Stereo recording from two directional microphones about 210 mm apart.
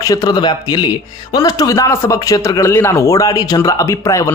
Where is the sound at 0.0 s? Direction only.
15° left (ahead or behind).